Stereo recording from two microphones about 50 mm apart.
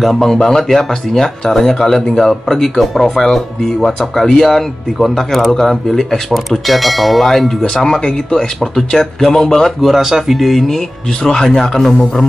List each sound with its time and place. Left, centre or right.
0.0 s speech: centre
9.8 s speech: centre